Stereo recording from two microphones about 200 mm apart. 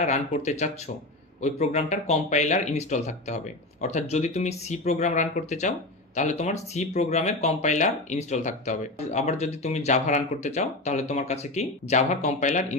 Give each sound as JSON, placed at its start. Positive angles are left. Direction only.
{"t": 0.0, "sound": "speech", "side_deg": 35}